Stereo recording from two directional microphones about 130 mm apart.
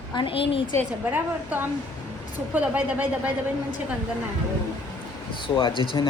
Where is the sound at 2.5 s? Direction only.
10° right (ahead or behind).